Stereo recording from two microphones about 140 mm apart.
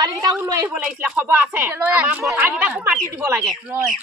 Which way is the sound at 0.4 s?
25° right (ahead or behind).